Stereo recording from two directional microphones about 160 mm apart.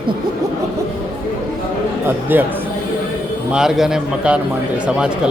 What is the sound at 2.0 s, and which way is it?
A man's voice, 10° right (ahead or behind).